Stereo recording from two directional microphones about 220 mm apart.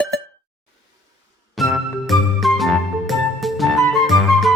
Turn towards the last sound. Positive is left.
turn(degrees=0)  # may be behind; listen again after turning